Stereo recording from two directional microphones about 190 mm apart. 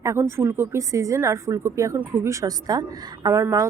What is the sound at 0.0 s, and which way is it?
Speech, 15° right (ahead or behind).